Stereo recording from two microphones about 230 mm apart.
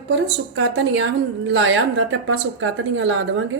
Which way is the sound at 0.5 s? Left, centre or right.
Right.